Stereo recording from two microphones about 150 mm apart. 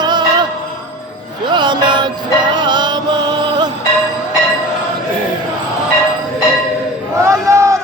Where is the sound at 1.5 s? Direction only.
30° right (ahead or behind).